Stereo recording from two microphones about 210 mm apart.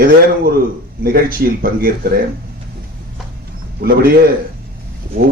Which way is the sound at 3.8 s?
45° right (ahead or behind).